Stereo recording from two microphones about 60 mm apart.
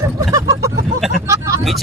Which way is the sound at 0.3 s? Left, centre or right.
Right.